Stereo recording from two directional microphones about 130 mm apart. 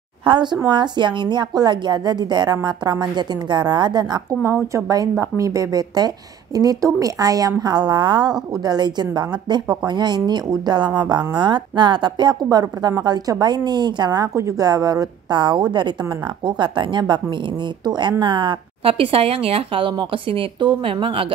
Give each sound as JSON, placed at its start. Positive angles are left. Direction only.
{"t": 0.2, "sound": "a woman's voice", "side_deg": -35}
{"t": 4.4, "sound": "a woman's voice", "side_deg": -20}
{"t": 18.2, "sound": "speech", "side_deg": -40}